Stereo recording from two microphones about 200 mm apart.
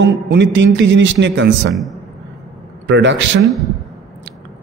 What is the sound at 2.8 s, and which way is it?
Speech, 60° right (ahead or behind).